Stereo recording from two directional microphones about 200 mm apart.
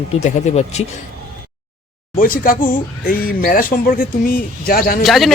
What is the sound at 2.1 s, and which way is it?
Speech, 45° left (ahead or behind).